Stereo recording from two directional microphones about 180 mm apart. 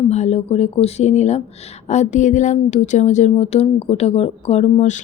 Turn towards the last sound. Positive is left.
turn(degrees=40)  # may be behind; listen again after turning